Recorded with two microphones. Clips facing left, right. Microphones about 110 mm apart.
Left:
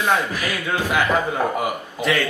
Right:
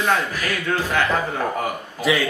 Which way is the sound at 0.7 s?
10° left (ahead or behind).